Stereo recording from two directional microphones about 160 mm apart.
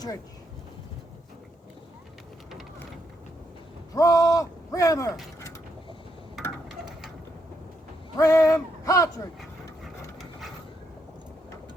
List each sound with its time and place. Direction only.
3.9 s speech: 20° left (ahead or behind)
8.1 s speech: 20° left (ahead or behind)
9.8 s engine: centre (ahead or behind)